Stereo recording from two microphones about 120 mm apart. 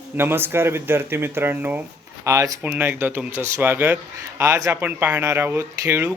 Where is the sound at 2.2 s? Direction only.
30° right (ahead or behind).